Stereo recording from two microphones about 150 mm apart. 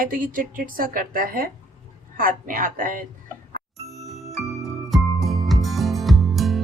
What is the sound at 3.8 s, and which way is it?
Music, centre (ahead or behind).